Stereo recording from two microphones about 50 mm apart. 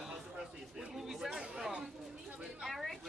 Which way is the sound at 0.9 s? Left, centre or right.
Centre.